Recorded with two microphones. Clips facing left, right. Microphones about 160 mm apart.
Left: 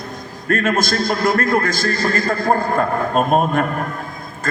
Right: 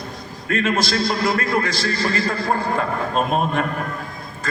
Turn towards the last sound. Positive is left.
turn(degrees=50)  # may be behind; listen again after turning